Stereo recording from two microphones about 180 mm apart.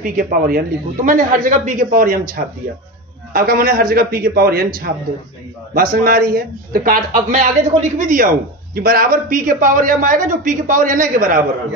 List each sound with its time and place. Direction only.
0.0 s a man's voice: 50° right (ahead or behind)
5.8 s speech: 55° right (ahead or behind)